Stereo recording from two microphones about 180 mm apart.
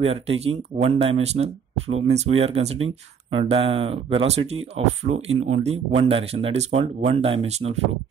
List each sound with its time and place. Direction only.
0.0 s speech: 35° right (ahead or behind)